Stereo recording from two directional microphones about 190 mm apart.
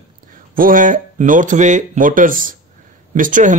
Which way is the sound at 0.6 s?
45° right (ahead or behind).